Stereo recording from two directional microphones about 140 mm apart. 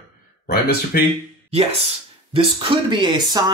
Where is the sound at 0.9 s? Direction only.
90° left.